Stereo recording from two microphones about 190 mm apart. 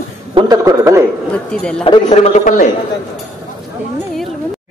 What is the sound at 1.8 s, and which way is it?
Speech, 25° left (ahead or behind).